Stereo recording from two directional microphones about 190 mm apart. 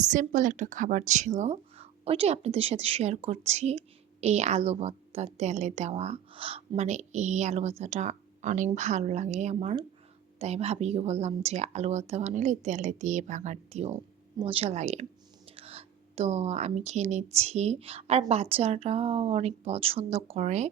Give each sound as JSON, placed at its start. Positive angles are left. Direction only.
{"t": 0.1, "sound": "a woman's voice", "side_deg": -40}
{"t": 15.4, "sound": "a sound", "side_deg": -30}
{"t": 17.3, "sound": "a woman's voice", "side_deg": -35}